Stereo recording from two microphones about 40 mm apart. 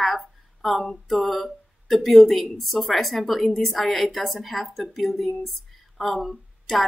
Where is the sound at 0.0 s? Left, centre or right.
Centre.